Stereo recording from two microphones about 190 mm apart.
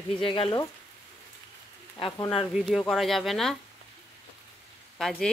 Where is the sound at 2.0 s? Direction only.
25° left (ahead or behind).